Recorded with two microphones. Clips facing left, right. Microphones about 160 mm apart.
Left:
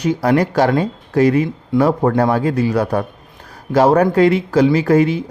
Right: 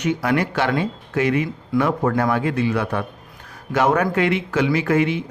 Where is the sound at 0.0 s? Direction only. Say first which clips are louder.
Left 5 dB; 35° left (ahead or behind).